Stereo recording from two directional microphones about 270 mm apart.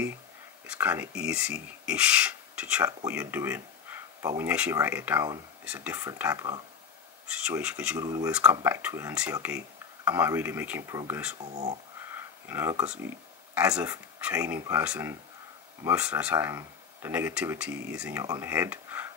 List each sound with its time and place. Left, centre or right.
0.7 s speech: centre
11.4 s speech: right
12.1 s speech: centre